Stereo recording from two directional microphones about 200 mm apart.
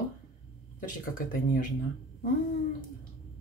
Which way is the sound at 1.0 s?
45° left (ahead or behind).